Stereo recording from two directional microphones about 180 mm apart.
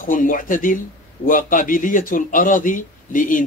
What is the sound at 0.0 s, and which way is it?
Speech, 50° left (ahead or behind).